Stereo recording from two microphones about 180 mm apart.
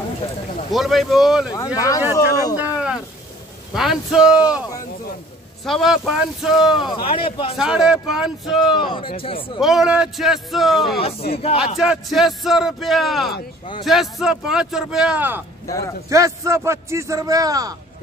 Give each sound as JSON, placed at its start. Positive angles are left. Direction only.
{"t": 0.7, "sound": "speech", "side_deg": 0}
{"t": 2.1, "sound": "speech", "side_deg": 20}
{"t": 2.5, "sound": "a sound", "side_deg": -10}
{"t": 3.7, "sound": "speech", "side_deg": 0}
{"t": 5.7, "sound": "speech", "side_deg": 0}
{"t": 6.8, "sound": "speech", "side_deg": 30}
{"t": 7.5, "sound": "speech", "side_deg": -5}
{"t": 8.9, "sound": "speech", "side_deg": 30}
{"t": 9.6, "sound": "speech", "side_deg": 0}
{"t": 11.0, "sound": "speech", "side_deg": 35}
{"t": 11.8, "sound": "speech", "side_deg": -5}
{"t": 15.6, "sound": "speech", "side_deg": 20}
{"t": 16.1, "sound": "a man's voice", "side_deg": -15}